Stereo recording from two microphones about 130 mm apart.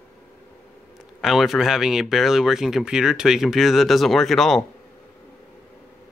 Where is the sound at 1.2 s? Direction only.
Centre (ahead or behind).